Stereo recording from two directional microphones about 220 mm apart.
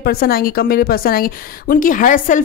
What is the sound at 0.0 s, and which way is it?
A woman's voice, 45° left (ahead or behind).